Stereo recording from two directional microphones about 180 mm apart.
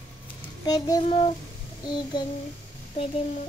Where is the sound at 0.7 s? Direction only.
20° left (ahead or behind).